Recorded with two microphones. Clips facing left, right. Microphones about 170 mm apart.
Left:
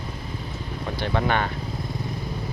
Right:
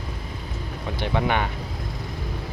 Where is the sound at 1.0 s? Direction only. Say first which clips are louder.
Even; 15° right (ahead or behind).